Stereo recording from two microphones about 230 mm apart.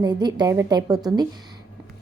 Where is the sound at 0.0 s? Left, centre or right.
Centre.